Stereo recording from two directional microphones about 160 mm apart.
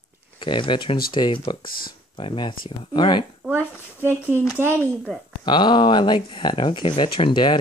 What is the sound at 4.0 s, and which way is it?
Speech, 15° right (ahead or behind).